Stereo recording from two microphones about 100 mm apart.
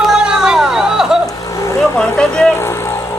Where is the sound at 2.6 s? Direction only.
25° left (ahead or behind).